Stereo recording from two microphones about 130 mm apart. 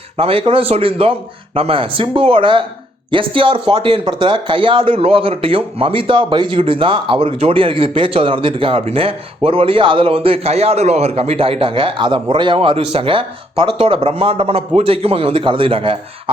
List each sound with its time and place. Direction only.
0.2 s speech: 45° right (ahead or behind)